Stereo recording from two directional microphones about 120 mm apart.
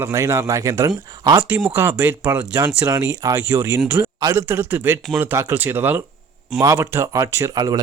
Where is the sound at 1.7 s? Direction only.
15° right (ahead or behind); by 7.8 s 35° right (ahead or behind).